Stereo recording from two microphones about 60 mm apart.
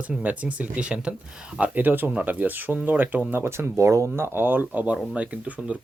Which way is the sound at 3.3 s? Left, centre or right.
Right.